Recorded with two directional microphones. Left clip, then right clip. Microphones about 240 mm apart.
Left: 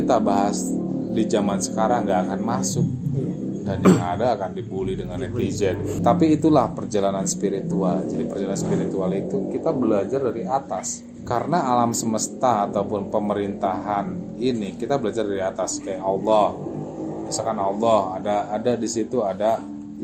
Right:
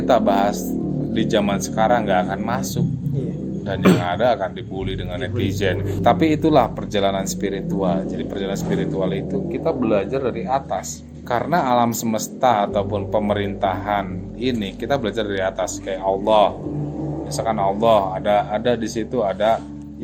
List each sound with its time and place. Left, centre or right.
0.1 s speech: right
4.0 s speech: right
9.0 s speech: right